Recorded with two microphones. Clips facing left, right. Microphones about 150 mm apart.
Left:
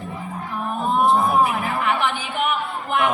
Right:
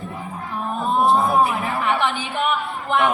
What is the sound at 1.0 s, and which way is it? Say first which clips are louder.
Chatter: right 1 dB; 30° right (ahead or behind).